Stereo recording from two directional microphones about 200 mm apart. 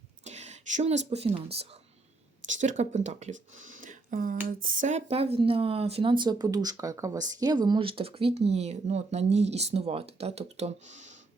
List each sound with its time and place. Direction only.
0.3 s speech: 35° right (ahead or behind)